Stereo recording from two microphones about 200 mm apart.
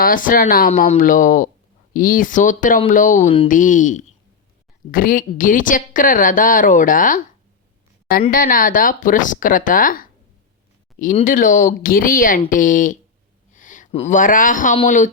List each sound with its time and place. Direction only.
0.0 s a woman's voice: 45° left (ahead or behind)
3.5 s a woman's voice: 40° left (ahead or behind)
8.3 s a woman's voice: 45° left (ahead or behind)